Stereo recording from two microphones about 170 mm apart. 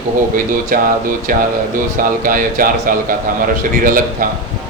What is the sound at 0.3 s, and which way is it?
A man's voice, 55° right (ahead or behind).